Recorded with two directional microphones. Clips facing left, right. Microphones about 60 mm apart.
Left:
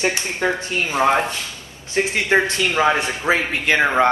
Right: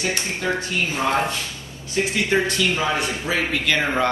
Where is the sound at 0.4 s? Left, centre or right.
Left.